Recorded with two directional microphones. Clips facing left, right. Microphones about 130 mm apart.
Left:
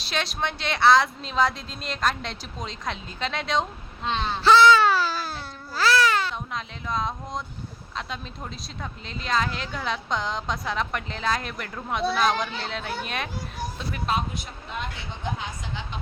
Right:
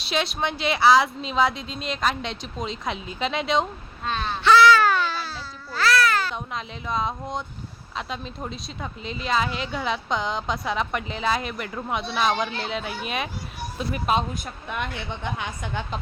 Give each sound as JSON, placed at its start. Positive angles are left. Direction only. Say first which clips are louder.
{"t": 0.0, "sound": "a woman's voice", "louder": "right 3 dB", "side_deg": 0}
{"t": 4.0, "sound": "baby cry", "louder": "even", "side_deg": 20}
{"t": 5.1, "sound": "baby cry", "louder": "left 1 dB", "side_deg": 45}
{"t": 6.3, "sound": "a woman's voice", "louder": "right 1 dB", "side_deg": 0}
{"t": 14.3, "sound": "a woman's voice", "louder": "right 3 dB", "side_deg": -55}